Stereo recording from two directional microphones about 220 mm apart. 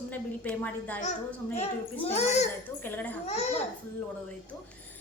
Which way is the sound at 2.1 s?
30° left (ahead or behind).